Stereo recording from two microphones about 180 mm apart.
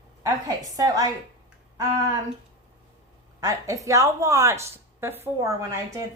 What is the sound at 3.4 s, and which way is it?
A woman's voice, 20° right (ahead or behind).